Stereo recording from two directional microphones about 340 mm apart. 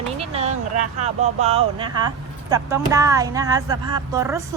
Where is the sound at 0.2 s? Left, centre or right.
Centre.